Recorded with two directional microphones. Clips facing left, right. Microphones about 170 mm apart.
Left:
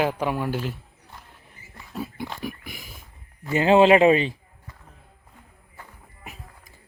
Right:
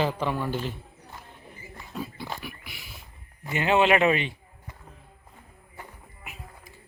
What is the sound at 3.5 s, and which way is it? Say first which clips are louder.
Speech: left 6 dB; 35° left (ahead or behind).